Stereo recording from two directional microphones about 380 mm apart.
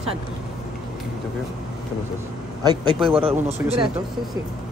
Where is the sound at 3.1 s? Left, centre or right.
Centre.